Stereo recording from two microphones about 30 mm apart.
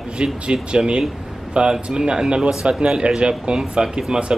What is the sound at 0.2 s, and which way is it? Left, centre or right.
Speech, right.